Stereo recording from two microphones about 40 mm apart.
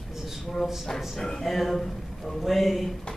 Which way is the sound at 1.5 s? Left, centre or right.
Centre.